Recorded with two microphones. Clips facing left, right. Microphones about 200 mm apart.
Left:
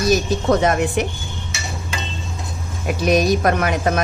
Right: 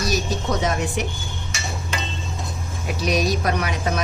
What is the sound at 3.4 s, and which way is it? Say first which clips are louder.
Speech: left 5 dB; 50° left (ahead or behind).